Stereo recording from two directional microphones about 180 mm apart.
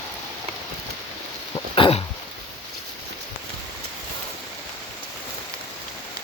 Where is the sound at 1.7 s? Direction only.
30° left (ahead or behind).